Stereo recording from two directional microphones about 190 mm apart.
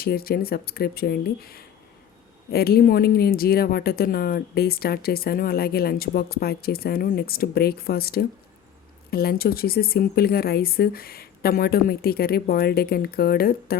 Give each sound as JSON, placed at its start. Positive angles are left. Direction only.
{"t": 0.0, "sound": "a woman's voice", "side_deg": 55}